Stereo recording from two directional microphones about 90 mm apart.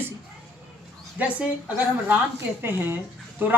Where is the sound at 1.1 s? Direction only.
15° right (ahead or behind).